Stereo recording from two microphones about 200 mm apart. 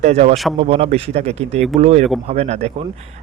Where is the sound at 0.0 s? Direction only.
30° right (ahead or behind).